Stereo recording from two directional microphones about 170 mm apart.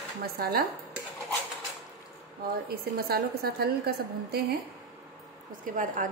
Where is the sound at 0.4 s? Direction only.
60° right (ahead or behind).